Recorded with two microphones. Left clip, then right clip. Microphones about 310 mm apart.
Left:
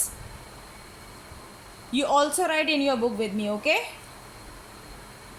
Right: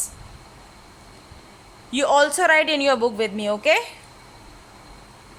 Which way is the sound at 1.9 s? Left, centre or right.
Right.